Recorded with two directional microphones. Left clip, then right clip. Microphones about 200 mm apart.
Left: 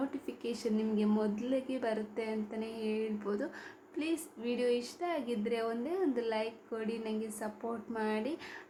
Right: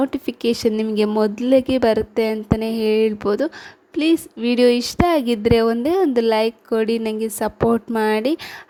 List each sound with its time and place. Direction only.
0.0 s speech: 45° right (ahead or behind)